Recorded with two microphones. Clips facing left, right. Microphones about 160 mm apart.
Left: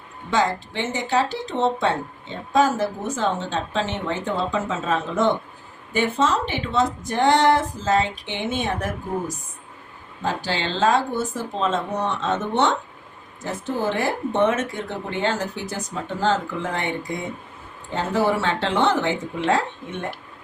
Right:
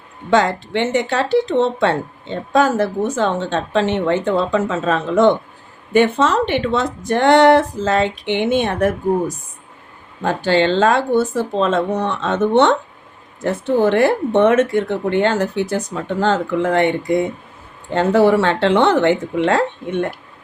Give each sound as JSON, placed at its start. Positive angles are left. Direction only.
{"t": 0.3, "sound": "speech", "side_deg": -65}
{"t": 10.2, "sound": "speech", "side_deg": -60}